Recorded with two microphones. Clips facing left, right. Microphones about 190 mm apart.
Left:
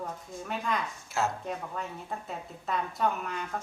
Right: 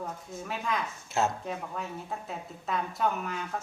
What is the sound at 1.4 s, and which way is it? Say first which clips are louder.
A woman's voice: even; centre (ahead or behind).